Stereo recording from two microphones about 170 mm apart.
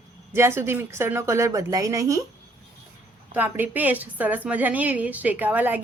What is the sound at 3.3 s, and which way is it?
A woman's voice, 10° right (ahead or behind).